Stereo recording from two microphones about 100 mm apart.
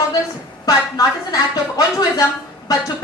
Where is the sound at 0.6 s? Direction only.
40° left (ahead or behind).